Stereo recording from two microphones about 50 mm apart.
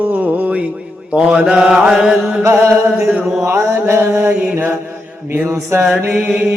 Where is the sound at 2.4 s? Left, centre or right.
Right.